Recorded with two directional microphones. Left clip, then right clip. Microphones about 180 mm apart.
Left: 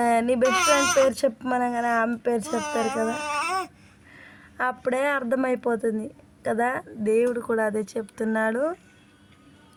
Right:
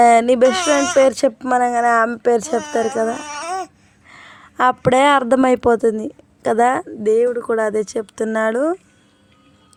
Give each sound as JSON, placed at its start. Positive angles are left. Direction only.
{"t": 0.0, "sound": "speech", "side_deg": -40}
{"t": 0.4, "sound": "speech", "side_deg": -15}
{"t": 1.0, "sound": "speech", "side_deg": -35}
{"t": 2.6, "sound": "speech", "side_deg": -15}
{"t": 4.1, "sound": "speech", "side_deg": -45}